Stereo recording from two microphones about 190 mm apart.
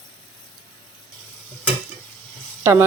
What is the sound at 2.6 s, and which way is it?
Speech, 10° right (ahead or behind).